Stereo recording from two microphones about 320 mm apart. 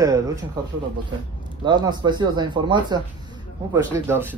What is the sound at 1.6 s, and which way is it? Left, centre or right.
Speech, centre.